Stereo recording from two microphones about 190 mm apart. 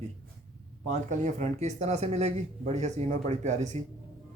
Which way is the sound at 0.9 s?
40° right (ahead or behind).